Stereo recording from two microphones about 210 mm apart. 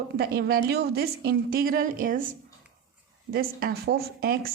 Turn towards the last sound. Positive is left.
turn(degrees=-45)  # may be behind; listen again after turning